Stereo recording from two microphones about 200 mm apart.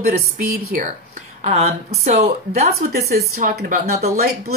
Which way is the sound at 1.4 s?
30° right (ahead or behind).